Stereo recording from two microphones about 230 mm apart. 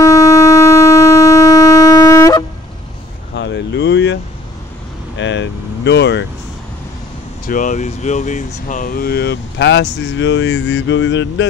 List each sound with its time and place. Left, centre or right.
0.0 s shofar: centre
3.3 s a sound: left
5.1 s vehicle: left
7.4 s speech: left